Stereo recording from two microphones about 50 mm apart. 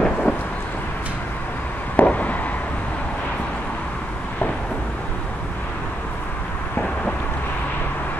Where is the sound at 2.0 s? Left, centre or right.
Left.